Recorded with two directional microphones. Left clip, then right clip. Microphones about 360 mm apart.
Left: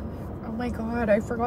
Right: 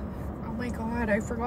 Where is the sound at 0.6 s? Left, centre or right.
Centre.